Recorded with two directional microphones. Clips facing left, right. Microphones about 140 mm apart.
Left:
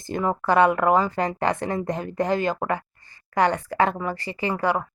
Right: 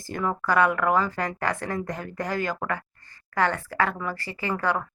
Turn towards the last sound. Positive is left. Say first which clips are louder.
# left 3 dB
turn(degrees=15)  # may be behind; listen again after turning